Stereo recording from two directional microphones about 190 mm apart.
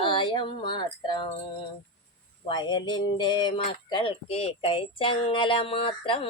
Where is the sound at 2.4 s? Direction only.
25° left (ahead or behind).